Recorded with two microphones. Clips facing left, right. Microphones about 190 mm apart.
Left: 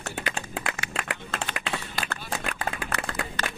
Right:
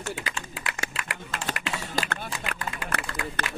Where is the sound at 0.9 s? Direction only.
55° left (ahead or behind).